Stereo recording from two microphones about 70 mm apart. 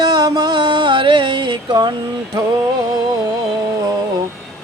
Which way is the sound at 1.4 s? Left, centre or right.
Right.